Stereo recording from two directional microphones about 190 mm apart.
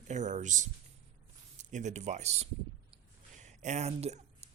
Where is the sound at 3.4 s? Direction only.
35° right (ahead or behind).